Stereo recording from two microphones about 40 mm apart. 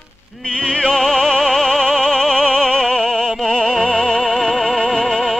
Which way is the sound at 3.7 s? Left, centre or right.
Centre.